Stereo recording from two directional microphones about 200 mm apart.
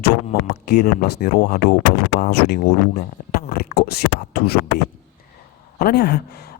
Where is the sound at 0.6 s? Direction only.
50° left (ahead or behind).